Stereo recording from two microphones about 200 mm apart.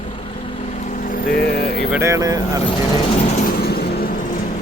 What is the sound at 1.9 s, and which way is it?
Speech, 15° right (ahead or behind).